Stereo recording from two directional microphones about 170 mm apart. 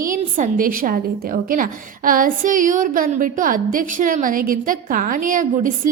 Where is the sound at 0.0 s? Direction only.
50° right (ahead or behind).